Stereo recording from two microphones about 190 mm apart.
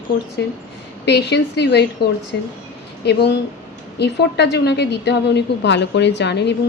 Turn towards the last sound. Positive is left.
turn(degrees=65)  # may be behind; listen again after turning